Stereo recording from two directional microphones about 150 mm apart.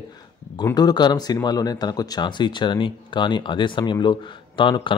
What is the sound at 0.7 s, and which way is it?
Speech, 25° left (ahead or behind).